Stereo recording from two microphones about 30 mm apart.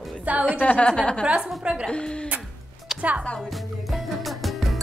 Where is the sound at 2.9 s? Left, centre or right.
Right.